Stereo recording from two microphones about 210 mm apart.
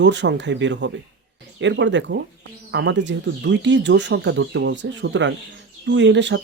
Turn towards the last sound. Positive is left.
turn(degrees=-60)  # may be behind; listen again after turning